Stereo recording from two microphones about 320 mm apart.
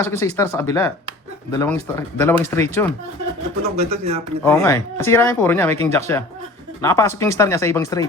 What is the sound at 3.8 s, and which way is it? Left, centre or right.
Speech, centre.